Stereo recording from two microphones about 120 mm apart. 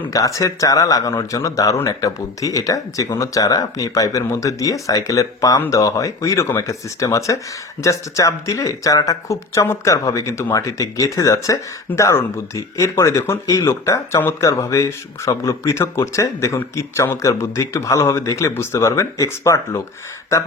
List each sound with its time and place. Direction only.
0.1 s speech: 25° left (ahead or behind)